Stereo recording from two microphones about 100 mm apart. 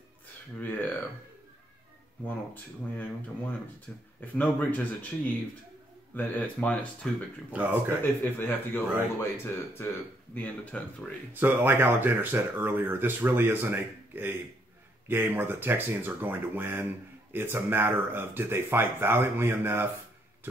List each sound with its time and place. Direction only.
0.6 s a sound: 20° left (ahead or behind)
2.2 s speech: 20° left (ahead or behind)
8.2 s a man's voice: 20° left (ahead or behind)
11.3 s speech: 20° right (ahead or behind)